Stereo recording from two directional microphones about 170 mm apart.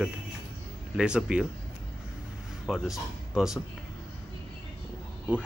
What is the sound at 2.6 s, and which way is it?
Speech, centre (ahead or behind).